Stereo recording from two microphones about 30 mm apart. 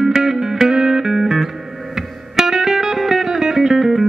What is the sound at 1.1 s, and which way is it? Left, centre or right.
Music, centre.